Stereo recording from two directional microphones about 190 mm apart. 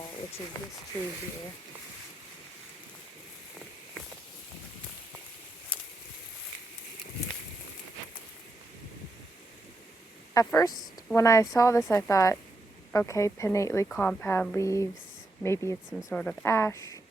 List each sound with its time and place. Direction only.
10.3 s speech: 15° left (ahead or behind)